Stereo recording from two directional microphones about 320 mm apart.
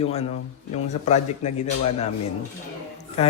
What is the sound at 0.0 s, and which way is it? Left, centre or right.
A man's voice, centre.